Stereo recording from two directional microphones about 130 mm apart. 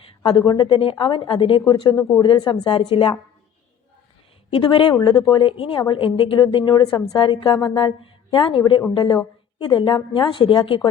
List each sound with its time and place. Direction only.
0.2 s a woman's voice: 35° left (ahead or behind)
4.6 s a woman's voice: 40° left (ahead or behind)
4.9 s speech: 25° left (ahead or behind)
5.5 s a woman's voice: 45° left (ahead or behind)